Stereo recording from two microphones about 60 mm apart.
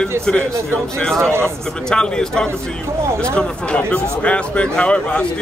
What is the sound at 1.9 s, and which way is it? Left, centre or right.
A man's voice, centre.